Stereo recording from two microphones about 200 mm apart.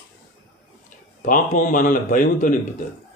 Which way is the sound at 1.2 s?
45° left (ahead or behind).